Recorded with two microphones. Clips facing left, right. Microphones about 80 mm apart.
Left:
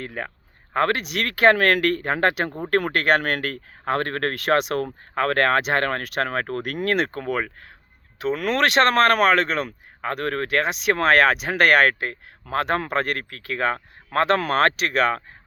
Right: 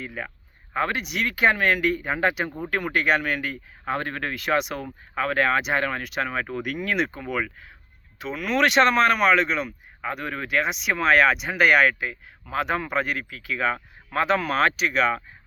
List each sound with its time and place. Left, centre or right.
0.0 s speech: left
1.3 s speech: left